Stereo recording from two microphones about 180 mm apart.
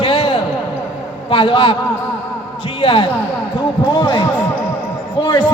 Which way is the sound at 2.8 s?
30° left (ahead or behind).